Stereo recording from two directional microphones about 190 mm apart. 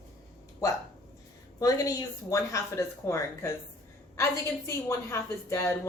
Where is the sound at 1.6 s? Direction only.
20° left (ahead or behind).